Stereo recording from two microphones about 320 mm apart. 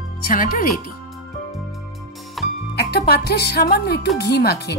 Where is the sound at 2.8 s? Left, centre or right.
Left.